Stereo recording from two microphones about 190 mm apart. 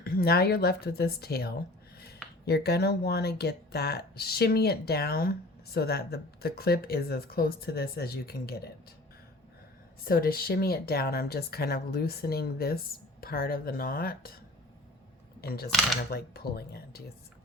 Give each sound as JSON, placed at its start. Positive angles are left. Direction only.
{"t": 0.0, "sound": "speech", "side_deg": 55}
{"t": 10.0, "sound": "speech", "side_deg": 50}
{"t": 15.4, "sound": "speech", "side_deg": 55}